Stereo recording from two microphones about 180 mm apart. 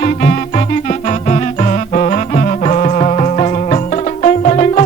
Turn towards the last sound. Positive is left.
turn(degrees=40)  # may be behind; listen again after turning